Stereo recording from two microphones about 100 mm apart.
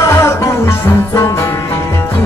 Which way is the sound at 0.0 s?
30° left (ahead or behind).